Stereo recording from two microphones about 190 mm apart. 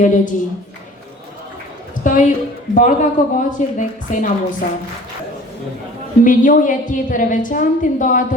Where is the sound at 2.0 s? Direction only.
45° left (ahead or behind).